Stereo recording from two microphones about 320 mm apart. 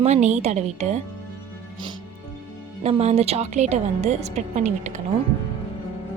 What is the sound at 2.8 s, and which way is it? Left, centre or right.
A woman's voice, centre.